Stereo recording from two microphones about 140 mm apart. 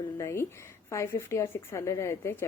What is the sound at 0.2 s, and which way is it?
A woman's voice, 20° left (ahead or behind).